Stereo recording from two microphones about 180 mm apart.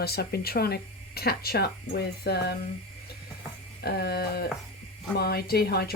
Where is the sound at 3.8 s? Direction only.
65° left (ahead or behind).